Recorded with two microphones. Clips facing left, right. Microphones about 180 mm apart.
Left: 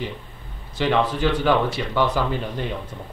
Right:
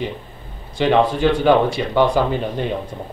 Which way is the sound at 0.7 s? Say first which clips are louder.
Right 5 dB; 25° right (ahead or behind).